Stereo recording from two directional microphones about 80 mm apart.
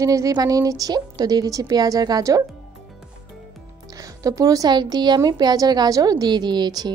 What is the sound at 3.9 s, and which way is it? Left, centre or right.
A woman's voice, right.